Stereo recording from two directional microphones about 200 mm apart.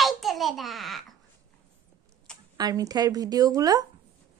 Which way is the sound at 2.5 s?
20° right (ahead or behind).